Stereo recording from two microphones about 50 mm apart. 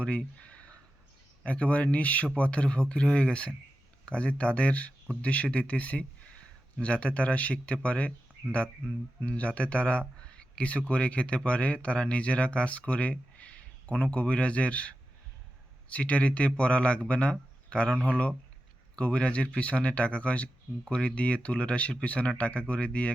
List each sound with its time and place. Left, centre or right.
0.0 s speech: left
9.2 s speech: left